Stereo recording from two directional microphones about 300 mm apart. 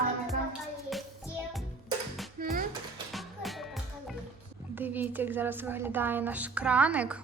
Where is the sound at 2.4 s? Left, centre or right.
Right.